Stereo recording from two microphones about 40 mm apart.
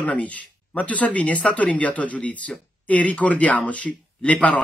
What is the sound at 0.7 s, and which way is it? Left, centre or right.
Speech, left.